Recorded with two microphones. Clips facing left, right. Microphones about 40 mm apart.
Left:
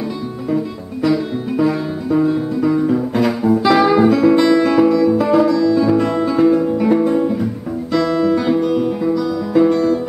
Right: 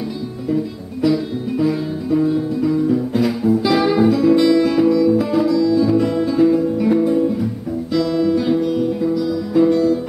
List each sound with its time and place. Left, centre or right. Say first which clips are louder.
1.0 s music: left 1 dB; centre
2.7 s music: even; left
7.9 s guitar: left 2 dB; centre
9.1 s music: left 1 dB; centre